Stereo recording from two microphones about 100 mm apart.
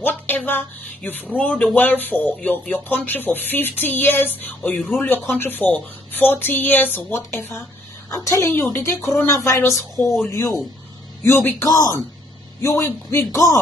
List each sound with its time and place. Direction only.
0.0 s speech: 15° left (ahead or behind)
8.1 s speech: 30° left (ahead or behind)
9.9 s speech: centre (ahead or behind)
10.3 s a man's voice: 30° left (ahead or behind)
11.7 s a man's voice: 35° left (ahead or behind)